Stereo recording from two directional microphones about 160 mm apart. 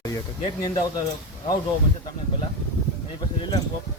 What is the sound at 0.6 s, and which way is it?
Speech, 25° left (ahead or behind).